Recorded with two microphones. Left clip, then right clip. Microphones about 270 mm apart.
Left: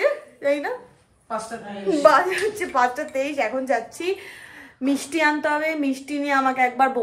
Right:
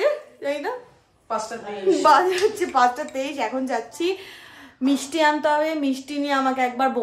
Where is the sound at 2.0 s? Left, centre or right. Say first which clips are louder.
Left 1 dB; centre.